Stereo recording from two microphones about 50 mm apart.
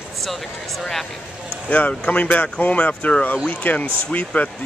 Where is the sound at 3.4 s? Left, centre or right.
Left.